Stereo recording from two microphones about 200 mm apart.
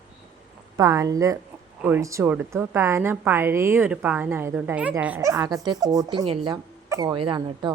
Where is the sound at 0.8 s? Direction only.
15° right (ahead or behind).